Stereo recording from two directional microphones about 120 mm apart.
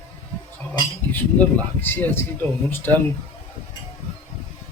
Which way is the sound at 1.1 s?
15° left (ahead or behind).